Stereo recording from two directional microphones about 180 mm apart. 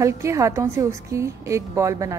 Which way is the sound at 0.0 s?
15° right (ahead or behind).